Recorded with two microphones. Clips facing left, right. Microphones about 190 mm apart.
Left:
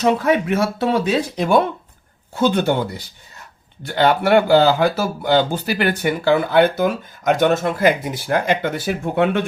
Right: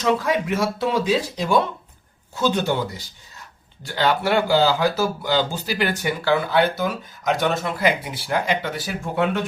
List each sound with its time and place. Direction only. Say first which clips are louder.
0.0 s speech: left 4 dB; 55° left (ahead or behind)